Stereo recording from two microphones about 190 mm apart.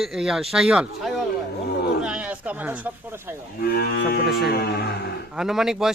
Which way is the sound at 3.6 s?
55° left (ahead or behind).